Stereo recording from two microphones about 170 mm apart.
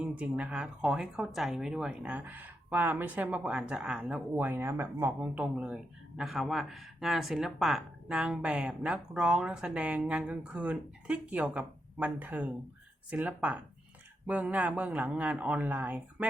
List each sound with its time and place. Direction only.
0.0 s a man's voice: 5° right (ahead or behind)